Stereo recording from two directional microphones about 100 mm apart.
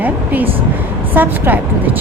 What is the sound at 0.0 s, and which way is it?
A woman's voice, 15° right (ahead or behind).